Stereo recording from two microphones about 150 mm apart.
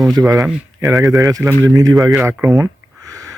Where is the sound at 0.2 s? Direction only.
20° right (ahead or behind).